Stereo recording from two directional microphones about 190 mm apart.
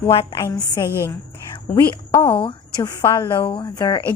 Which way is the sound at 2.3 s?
25° left (ahead or behind).